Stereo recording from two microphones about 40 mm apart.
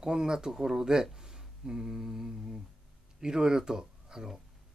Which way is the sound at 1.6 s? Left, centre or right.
Centre.